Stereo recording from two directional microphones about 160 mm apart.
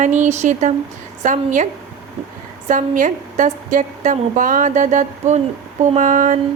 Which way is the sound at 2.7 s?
55° right (ahead or behind).